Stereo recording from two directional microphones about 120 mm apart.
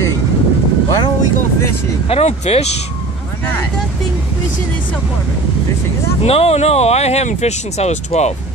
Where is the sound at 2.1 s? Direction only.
60° left (ahead or behind).